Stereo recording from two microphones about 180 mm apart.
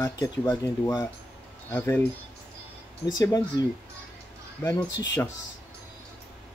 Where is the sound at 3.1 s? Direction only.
20° left (ahead or behind).